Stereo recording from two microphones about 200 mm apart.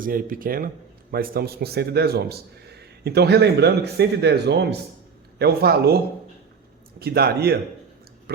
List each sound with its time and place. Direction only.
0.0 s speech: 45° right (ahead or behind)
7.0 s speech: 50° right (ahead or behind)